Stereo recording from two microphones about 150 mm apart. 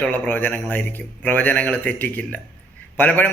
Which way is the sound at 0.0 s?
10° left (ahead or behind).